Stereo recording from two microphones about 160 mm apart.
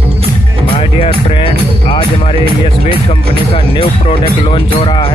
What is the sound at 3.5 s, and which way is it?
Speech, 35° left (ahead or behind).